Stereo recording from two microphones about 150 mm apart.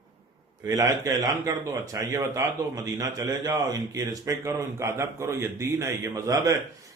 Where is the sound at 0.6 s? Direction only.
20° right (ahead or behind).